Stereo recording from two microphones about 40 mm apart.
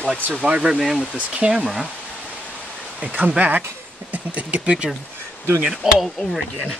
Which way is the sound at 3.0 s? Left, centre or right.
Right.